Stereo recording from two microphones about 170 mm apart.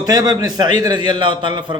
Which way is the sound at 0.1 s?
25° right (ahead or behind).